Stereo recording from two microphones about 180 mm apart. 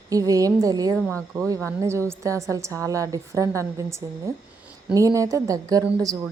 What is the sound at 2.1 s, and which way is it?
A woman's voice, 15° right (ahead or behind).